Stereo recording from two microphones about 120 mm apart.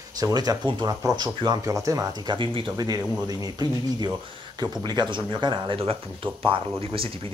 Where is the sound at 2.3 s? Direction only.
45° right (ahead or behind).